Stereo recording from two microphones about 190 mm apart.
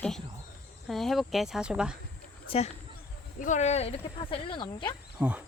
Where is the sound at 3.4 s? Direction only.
40° left (ahead or behind).